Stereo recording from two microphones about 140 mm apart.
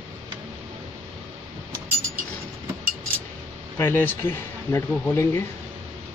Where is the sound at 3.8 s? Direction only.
15° left (ahead or behind).